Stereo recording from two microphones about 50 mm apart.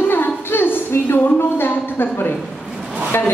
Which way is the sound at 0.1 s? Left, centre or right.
Left.